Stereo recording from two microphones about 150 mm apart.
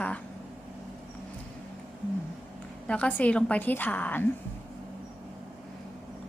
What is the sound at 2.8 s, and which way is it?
A woman's voice, 10° left (ahead or behind).